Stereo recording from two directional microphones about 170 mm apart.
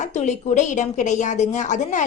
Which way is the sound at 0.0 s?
45° left (ahead or behind).